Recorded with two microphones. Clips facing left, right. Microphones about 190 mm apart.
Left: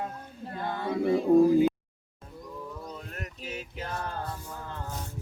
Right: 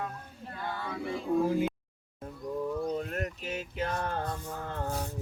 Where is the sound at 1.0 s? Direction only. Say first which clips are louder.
Left 9 dB; 40° left (ahead or behind).